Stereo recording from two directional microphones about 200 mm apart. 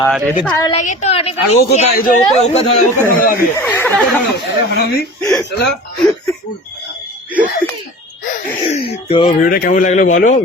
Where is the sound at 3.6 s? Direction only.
10° left (ahead or behind).